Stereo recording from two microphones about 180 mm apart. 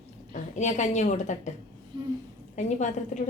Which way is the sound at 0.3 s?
40° left (ahead or behind).